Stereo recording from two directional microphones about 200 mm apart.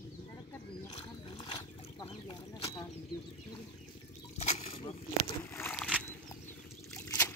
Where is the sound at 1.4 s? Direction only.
25° left (ahead or behind).